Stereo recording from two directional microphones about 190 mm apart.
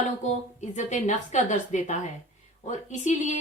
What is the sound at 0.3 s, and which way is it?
Speech, 40° left (ahead or behind).